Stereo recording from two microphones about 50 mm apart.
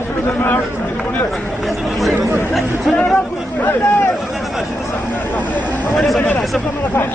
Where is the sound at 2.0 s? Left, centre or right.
Centre.